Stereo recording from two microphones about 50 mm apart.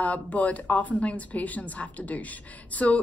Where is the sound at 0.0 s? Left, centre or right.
Left.